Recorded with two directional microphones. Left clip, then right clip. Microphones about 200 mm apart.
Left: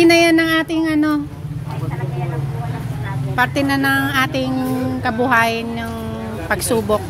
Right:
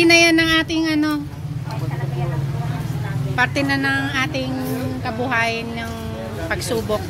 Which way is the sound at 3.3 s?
15° left (ahead or behind).